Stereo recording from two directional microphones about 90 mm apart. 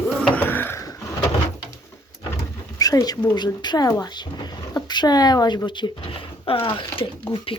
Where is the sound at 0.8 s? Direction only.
40° left (ahead or behind).